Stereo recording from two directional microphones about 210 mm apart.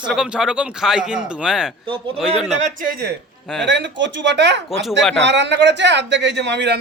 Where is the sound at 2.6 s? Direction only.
40° right (ahead or behind).